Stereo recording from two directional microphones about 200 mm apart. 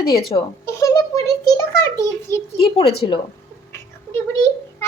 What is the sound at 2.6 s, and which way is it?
Speech, 30° left (ahead or behind).